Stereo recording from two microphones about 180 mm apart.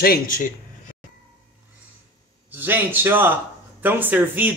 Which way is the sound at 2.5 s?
10° right (ahead or behind).